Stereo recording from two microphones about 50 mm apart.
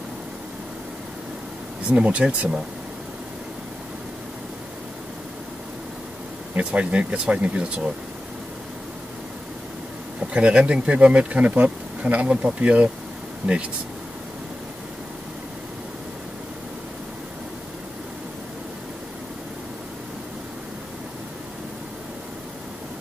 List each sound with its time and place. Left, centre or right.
1.9 s speech: right
6.5 s speech: right
10.3 s speech: centre